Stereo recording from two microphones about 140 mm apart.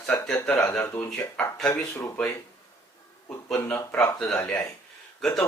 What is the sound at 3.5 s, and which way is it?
Speech, 15° left (ahead or behind).